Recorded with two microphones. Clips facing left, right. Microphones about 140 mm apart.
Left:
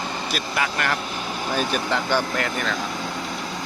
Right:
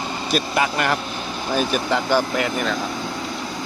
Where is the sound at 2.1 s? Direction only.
10° right (ahead or behind).